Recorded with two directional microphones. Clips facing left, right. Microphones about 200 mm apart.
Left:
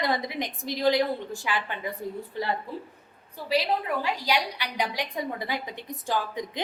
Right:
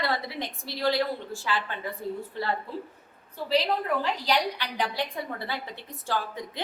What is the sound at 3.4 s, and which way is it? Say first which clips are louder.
A woman's voice: even; 10° left (ahead or behind).